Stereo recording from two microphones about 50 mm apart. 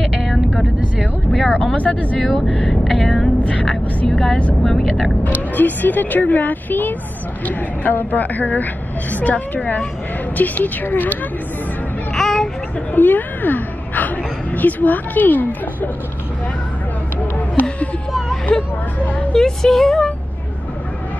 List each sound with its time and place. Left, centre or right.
0.0 s vehicle: centre
1.9 s speech: left
2.2 s speech: centre
3.3 s music: left
4.1 s speech: centre
5.6 s a woman's voice: left
12.1 s a sound: centre
12.9 s a woman's voice: left
17.2 s a sound: left
18.5 s speech: centre
18.9 s a woman's voice: left
19.3 s speech: centre